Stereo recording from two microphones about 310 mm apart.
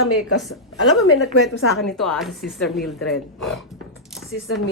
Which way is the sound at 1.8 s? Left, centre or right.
Centre.